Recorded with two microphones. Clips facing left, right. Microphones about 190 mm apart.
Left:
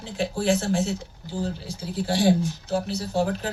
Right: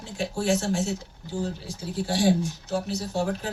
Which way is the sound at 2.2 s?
45° right (ahead or behind).